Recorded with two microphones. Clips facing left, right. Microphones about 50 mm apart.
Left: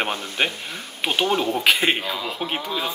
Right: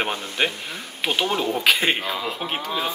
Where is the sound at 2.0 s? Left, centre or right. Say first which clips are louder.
Even; centre.